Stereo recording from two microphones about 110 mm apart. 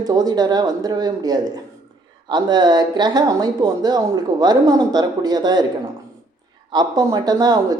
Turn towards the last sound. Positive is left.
turn(degrees=-35)  # may be behind; listen again after turning